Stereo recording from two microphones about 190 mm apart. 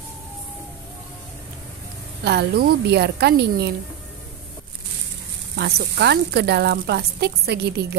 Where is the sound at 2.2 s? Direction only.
55° right (ahead or behind).